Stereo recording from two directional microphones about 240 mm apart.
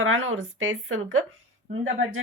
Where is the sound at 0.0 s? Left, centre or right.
Right.